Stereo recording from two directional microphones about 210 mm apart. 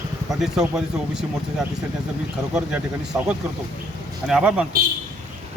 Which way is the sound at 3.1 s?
5° right (ahead or behind).